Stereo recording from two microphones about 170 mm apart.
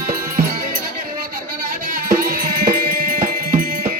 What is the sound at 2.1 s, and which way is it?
Music, 60° right (ahead or behind).